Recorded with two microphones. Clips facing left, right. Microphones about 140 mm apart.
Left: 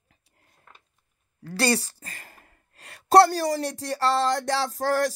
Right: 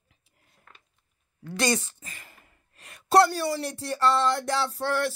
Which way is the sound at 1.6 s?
35° left (ahead or behind).